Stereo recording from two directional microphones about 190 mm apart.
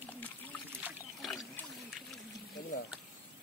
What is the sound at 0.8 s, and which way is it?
Boat, centre (ahead or behind).